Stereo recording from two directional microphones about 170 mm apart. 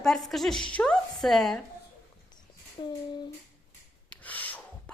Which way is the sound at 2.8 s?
25° left (ahead or behind).